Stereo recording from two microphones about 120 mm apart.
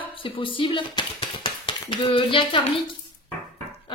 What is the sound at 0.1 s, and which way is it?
Speech, 45° left (ahead or behind).